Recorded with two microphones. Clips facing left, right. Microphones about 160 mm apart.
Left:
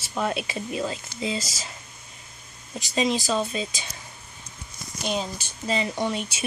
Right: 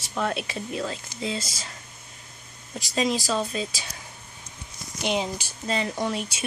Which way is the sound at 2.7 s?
Centre (ahead or behind).